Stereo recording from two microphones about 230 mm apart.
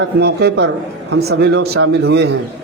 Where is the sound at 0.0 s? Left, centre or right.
Right.